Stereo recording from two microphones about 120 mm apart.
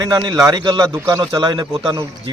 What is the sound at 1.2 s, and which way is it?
Speech, 35° right (ahead or behind).